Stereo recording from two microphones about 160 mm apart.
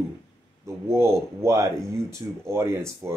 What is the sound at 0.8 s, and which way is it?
Speech, 15° right (ahead or behind).